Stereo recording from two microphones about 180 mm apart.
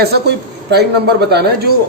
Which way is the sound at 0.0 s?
65° right (ahead or behind).